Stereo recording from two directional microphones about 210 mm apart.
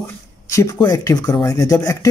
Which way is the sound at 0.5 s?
15° left (ahead or behind).